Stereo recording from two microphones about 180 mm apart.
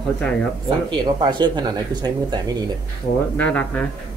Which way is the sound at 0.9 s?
25° right (ahead or behind).